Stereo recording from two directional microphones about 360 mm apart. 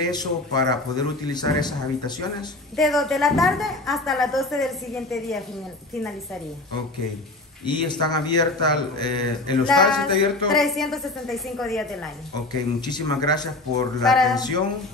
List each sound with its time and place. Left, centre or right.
0.0 s a man's voice: centre
2.7 s a woman's voice: centre
7.6 s a man's voice: centre
10.5 s a woman's voice: centre
12.8 s a man's voice: centre
14.3 s a man's voice: centre